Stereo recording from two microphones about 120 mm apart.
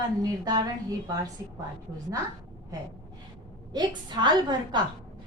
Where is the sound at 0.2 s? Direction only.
30° right (ahead or behind).